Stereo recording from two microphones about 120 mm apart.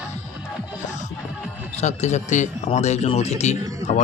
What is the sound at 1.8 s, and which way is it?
Speech, 75° left (ahead or behind).